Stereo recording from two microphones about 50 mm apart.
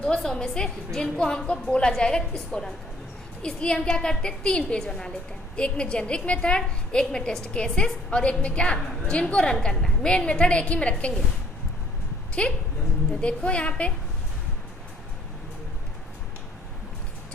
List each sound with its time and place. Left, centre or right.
0.2 s a woman's voice: centre
12.3 s a woman's voice: left